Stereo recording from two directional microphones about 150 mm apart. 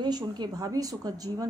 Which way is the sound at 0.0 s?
30° right (ahead or behind).